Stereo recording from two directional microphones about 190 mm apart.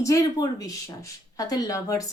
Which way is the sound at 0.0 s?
15° left (ahead or behind).